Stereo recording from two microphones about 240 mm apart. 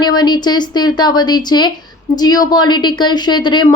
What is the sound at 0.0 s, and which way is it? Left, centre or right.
Speech, centre.